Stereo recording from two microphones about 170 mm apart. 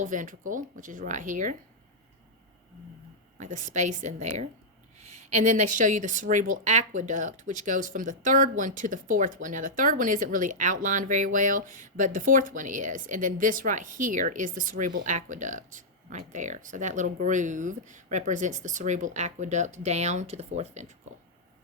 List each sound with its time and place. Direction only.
0.0 s speech: 50° right (ahead or behind)
3.3 s speech: 45° right (ahead or behind)